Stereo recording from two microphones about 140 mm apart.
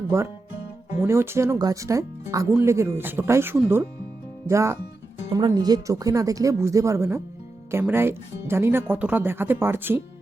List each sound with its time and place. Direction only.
1.0 s speech: 20° right (ahead or behind)